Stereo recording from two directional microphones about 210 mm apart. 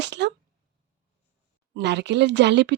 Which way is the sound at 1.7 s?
55° right (ahead or behind).